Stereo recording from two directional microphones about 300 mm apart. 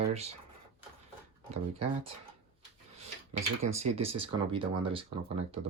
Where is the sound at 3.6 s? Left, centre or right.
Right.